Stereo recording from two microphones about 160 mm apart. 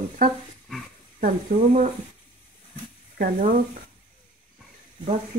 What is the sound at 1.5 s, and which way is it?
Speech, 45° right (ahead or behind).